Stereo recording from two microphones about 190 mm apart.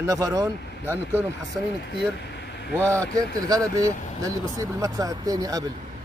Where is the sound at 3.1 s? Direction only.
20° right (ahead or behind).